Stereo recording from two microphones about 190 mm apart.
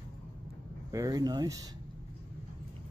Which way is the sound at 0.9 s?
20° right (ahead or behind).